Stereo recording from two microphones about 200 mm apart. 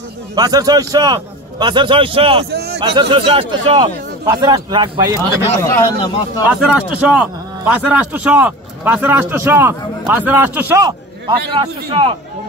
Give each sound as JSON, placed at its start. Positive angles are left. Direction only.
{"t": 0.4, "sound": "speech", "side_deg": -20}
{"t": 2.5, "sound": "a sound", "side_deg": -55}
{"t": 2.8, "sound": "speech", "side_deg": -25}
{"t": 5.6, "sound": "a man's voice", "side_deg": 20}
{"t": 6.6, "sound": "a man's voice", "side_deg": -5}